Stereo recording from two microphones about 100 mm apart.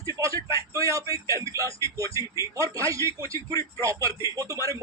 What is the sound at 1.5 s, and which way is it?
Music, 30° right (ahead or behind).